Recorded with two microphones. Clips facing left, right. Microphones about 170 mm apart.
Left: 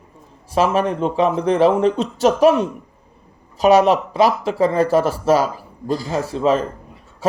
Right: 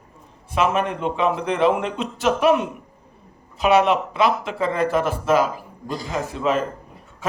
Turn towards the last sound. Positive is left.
turn(degrees=35)  # may be behind; listen again after turning